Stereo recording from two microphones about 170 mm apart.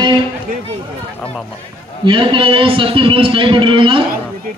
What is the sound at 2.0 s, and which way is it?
A man's voice, 30° right (ahead or behind).